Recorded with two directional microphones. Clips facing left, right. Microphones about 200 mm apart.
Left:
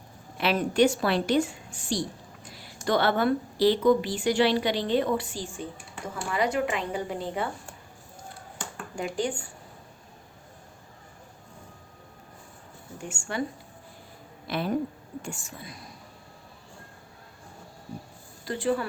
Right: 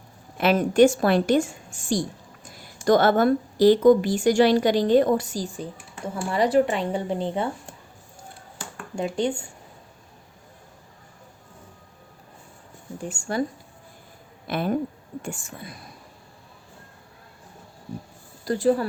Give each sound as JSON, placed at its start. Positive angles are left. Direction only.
{"t": 0.3, "sound": "a woman's voice", "side_deg": -50}
{"t": 9.0, "sound": "speech", "side_deg": -25}
{"t": 13.0, "sound": "a woman's voice", "side_deg": -35}
{"t": 14.4, "sound": "a woman's voice", "side_deg": -50}
{"t": 18.4, "sound": "a woman's voice", "side_deg": -40}